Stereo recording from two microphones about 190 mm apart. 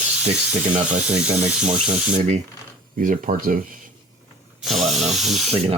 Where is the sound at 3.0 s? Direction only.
45° right (ahead or behind).